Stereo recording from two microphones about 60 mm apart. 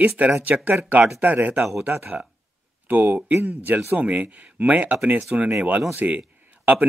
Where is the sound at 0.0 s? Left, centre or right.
Right.